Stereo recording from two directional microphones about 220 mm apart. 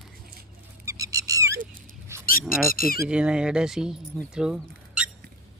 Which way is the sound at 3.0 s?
5° right (ahead or behind).